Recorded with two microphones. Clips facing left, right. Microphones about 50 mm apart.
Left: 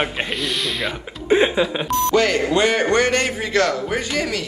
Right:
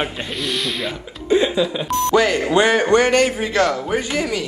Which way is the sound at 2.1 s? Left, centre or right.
Centre.